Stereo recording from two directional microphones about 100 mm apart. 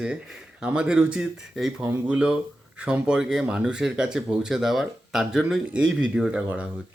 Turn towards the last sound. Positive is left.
turn(degrees=-15)  # may be behind; listen again after turning